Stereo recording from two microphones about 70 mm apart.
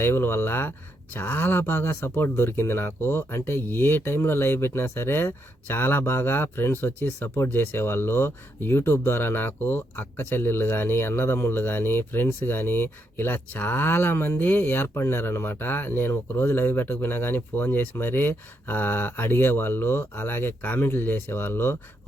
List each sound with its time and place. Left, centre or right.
0.0 s speech: left